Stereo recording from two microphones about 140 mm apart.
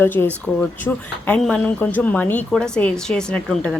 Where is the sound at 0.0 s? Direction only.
15° left (ahead or behind).